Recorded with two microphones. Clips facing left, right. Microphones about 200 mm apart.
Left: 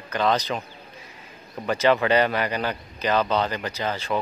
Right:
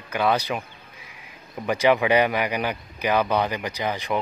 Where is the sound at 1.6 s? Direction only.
15° right (ahead or behind).